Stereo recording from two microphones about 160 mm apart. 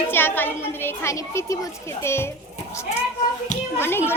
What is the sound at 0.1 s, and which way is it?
A child's voice, 15° left (ahead or behind).